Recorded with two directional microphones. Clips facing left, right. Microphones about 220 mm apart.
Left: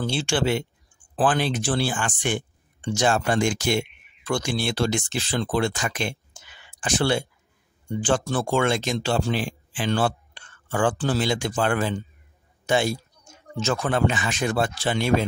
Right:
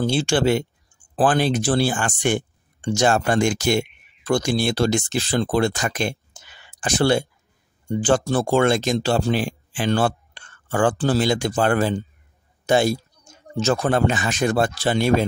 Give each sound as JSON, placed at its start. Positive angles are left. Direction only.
{"t": 0.0, "sound": "speech", "side_deg": -40}